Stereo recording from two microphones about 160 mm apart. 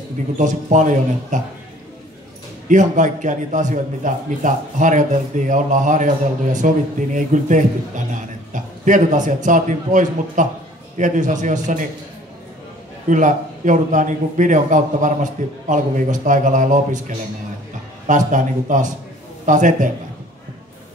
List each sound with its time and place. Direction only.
0.4 s a man's voice: 50° right (ahead or behind)
2.7 s a man's voice: 50° right (ahead or behind)
13.1 s a man's voice: 55° right (ahead or behind)
18.0 s a man's voice: 50° right (ahead or behind)